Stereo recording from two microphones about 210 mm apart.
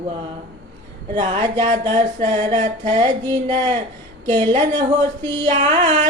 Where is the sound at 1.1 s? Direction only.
30° right (ahead or behind).